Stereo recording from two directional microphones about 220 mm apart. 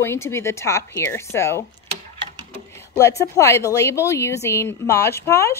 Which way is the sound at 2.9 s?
15° left (ahead or behind).